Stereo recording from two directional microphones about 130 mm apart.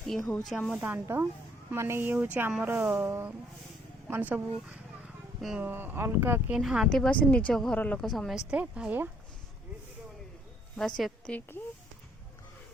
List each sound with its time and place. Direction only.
0.1 s a woman's voice: centre (ahead or behind)
0.8 s speech: 20° right (ahead or behind); by 5.6 s centre (ahead or behind)
5.6 s speech: 15° right (ahead or behind)
6.5 s a woman's voice: 5° right (ahead or behind)
10.8 s a woman's voice: 5° left (ahead or behind)